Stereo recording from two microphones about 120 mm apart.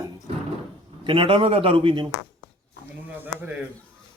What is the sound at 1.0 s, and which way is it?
A man's voice, 45° right (ahead or behind).